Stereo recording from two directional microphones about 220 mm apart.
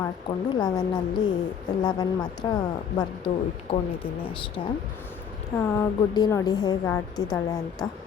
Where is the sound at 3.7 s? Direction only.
25° left (ahead or behind).